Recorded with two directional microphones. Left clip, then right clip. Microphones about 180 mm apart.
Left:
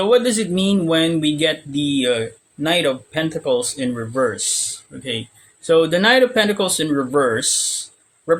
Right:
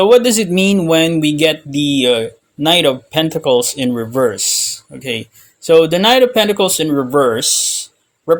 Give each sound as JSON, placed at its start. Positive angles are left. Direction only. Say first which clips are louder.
{"t": 0.0, "sound": "speech", "louder": "right 6 dB", "side_deg": -35}